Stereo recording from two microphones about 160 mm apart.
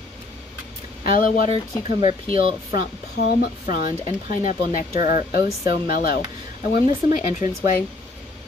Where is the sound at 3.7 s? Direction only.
55° left (ahead or behind).